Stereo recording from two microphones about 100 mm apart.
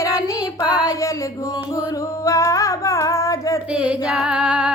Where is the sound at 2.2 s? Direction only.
30° left (ahead or behind).